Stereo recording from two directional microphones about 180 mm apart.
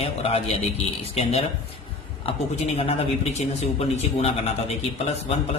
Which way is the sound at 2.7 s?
35° left (ahead or behind).